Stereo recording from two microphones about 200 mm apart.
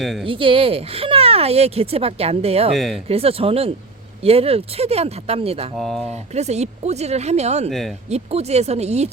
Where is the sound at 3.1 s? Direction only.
30° right (ahead or behind).